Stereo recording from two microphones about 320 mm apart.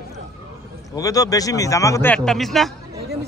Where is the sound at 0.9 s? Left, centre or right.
Centre.